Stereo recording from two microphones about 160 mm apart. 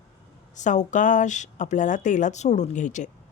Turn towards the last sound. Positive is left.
turn(degrees=50)  # may be behind; listen again after turning